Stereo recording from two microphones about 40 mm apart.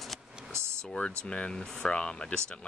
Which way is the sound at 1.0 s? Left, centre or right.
Left.